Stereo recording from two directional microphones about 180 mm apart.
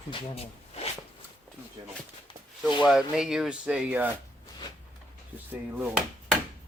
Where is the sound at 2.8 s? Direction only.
5° right (ahead or behind).